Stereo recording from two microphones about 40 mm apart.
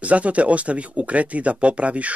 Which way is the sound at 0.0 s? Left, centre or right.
Right.